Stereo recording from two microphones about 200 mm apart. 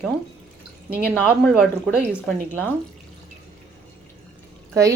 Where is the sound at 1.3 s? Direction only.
5° right (ahead or behind).